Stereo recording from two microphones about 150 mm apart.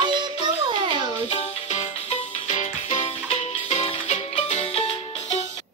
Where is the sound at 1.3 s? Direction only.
45° left (ahead or behind).